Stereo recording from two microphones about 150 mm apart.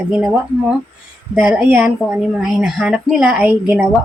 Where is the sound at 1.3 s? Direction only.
5° right (ahead or behind).